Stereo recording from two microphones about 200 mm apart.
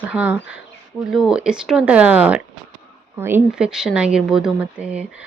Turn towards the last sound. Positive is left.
turn(degrees=-5)  # may be behind; listen again after turning